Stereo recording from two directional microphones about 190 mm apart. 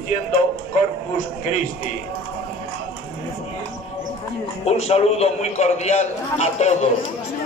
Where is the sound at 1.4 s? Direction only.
40° left (ahead or behind).